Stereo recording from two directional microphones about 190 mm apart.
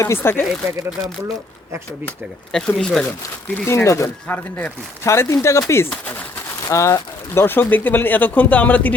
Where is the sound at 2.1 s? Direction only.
5° left (ahead or behind).